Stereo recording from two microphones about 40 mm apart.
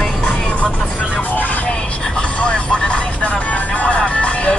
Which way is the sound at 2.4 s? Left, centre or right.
Left.